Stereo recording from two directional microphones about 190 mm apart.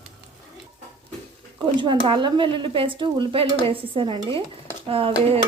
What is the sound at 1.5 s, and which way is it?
Speech, 25° right (ahead or behind).